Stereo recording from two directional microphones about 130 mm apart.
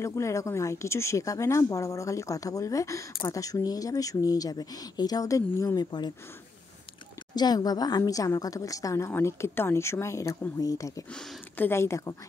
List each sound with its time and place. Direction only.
0.0 s speech: 20° left (ahead or behind)
7.3 s speech: 30° left (ahead or behind)